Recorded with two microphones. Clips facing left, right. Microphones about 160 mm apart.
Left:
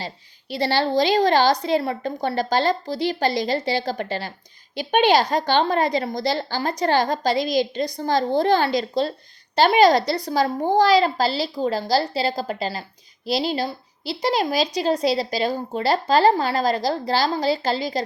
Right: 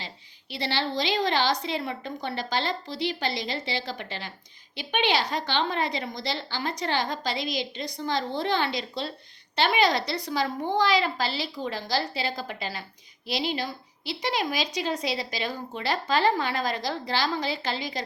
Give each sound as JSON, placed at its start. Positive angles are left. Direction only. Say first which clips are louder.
{"t": 0.5, "sound": "a woman's voice", "louder": "left 8 dB", "side_deg": 40}